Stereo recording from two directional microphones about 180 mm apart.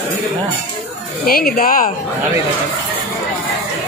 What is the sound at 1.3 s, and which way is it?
Speech, 55° left (ahead or behind).